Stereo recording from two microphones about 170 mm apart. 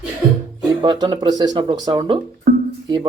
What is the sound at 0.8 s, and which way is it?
A man's voice, 25° right (ahead or behind).